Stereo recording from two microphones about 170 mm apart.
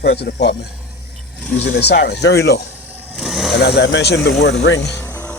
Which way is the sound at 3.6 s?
80° left.